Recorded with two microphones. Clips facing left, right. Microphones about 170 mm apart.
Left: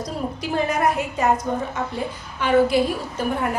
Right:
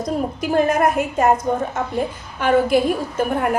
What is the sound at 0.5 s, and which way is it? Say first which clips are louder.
Speech: right 5 dB; 50° right (ahead or behind).